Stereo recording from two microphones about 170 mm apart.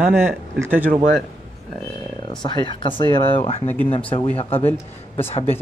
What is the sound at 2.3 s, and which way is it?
Speech, 25° left (ahead or behind).